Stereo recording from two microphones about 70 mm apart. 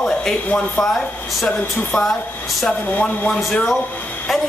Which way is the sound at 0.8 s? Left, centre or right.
Centre.